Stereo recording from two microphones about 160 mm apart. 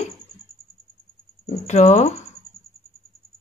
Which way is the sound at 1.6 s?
45° left (ahead or behind).